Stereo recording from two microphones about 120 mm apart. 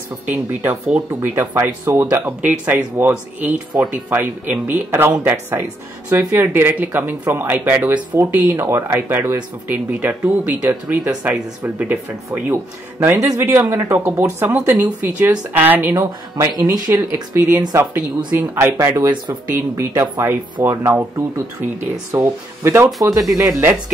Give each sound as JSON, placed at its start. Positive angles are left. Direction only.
{"t": 0.3, "sound": "speech", "side_deg": -15}
{"t": 13.0, "sound": "speech", "side_deg": -20}
{"t": 15.9, "sound": "speech", "side_deg": -30}